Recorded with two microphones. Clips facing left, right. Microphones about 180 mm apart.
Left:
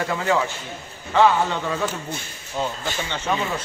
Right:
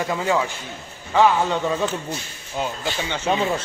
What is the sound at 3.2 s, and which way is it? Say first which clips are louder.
Speech: right 4 dB; 25° right (ahead or behind).